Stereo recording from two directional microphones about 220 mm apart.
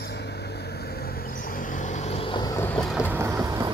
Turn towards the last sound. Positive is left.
turn(degrees=-15)  # may be behind; listen again after turning